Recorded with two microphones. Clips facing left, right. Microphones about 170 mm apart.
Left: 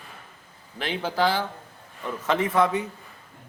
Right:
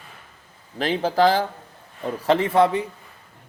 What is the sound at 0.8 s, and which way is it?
Speech, 40° right (ahead or behind).